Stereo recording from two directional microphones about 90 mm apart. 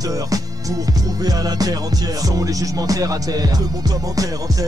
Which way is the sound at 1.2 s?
45° right (ahead or behind).